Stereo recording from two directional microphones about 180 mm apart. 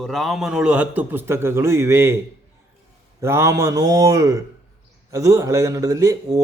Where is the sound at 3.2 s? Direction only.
15° right (ahead or behind).